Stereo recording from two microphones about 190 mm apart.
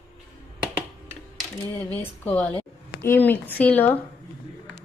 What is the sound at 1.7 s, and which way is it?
A woman's voice, 10° left (ahead or behind).